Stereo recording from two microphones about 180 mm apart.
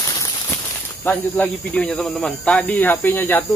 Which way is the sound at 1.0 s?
10° left (ahead or behind).